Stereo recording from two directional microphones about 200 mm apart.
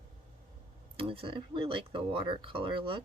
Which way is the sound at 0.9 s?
25° right (ahead or behind).